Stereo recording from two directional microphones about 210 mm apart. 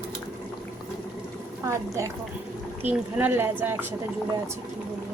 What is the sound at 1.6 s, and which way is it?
Pour, 15° right (ahead or behind).